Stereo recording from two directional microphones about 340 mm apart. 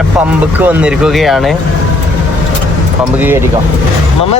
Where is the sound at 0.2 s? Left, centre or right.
Centre.